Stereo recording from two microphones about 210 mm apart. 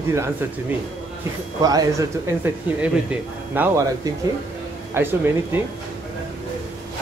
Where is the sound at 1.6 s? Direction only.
15° right (ahead or behind).